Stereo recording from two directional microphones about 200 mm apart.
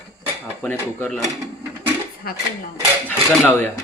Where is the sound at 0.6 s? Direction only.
10° left (ahead or behind).